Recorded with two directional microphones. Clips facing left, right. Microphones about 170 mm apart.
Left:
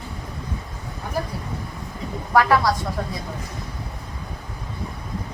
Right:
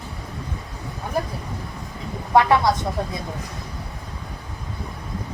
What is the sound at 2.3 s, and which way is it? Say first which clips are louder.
Speech: right 1 dB; 25° right (ahead or behind).